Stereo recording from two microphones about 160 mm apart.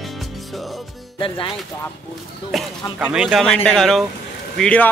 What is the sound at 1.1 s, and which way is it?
Speech, 30° left (ahead or behind).